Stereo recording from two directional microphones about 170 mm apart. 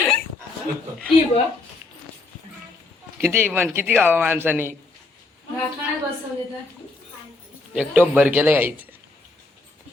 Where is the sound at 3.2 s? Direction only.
10° right (ahead or behind).